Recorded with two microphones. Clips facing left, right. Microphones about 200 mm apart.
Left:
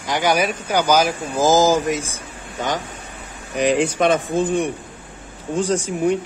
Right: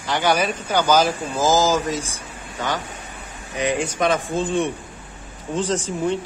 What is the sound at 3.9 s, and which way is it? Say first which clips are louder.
Speech: left 3 dB; 25° left (ahead or behind).